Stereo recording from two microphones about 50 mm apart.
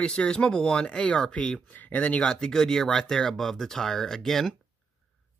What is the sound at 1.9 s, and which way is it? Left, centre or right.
Speech, left.